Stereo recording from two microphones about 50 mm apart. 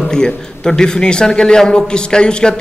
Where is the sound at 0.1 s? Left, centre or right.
Centre.